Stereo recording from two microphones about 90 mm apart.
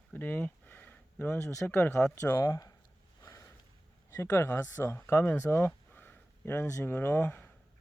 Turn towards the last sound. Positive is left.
turn(degrees=20)  # may be behind; listen again after turning